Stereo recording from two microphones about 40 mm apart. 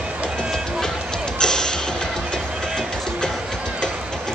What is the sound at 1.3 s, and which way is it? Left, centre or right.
Music, centre.